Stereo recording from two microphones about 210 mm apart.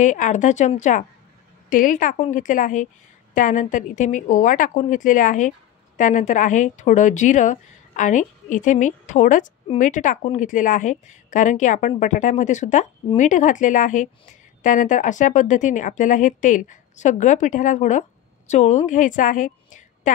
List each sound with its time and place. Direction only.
0.0 s a woman's voice: 35° left (ahead or behind)